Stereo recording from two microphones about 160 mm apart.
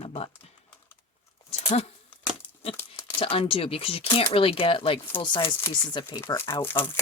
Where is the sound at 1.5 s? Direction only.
40° left (ahead or behind).